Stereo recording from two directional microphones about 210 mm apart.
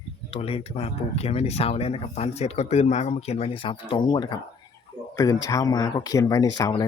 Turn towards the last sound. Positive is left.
turn(degrees=20)  # may be behind; listen again after turning